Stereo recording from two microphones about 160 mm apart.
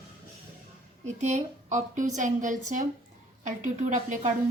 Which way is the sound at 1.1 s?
45° right (ahead or behind).